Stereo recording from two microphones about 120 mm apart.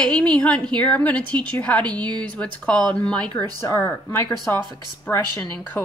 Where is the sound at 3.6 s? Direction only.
20° left (ahead or behind).